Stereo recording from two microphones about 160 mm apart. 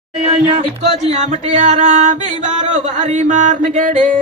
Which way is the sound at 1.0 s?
45° right (ahead or behind).